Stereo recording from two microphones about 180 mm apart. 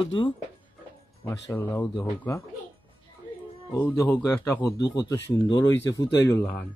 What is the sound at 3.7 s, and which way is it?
Speech, 15° left (ahead or behind).